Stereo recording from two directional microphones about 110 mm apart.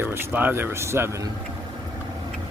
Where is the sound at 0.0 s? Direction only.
20° right (ahead or behind).